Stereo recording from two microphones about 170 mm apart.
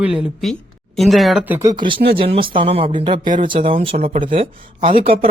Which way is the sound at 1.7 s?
30° right (ahead or behind).